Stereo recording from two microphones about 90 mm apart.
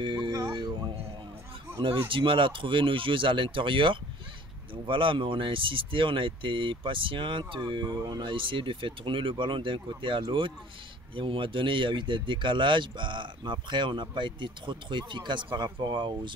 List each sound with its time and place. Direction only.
0.0 s speech: 65° right (ahead or behind)
0.5 s music: 65° right (ahead or behind)
1.8 s speech: 75° right (ahead or behind); by 16.1 s 55° right (ahead or behind)